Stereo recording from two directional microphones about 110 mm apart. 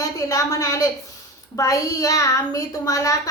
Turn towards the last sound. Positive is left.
turn(degrees=30)  # may be behind; listen again after turning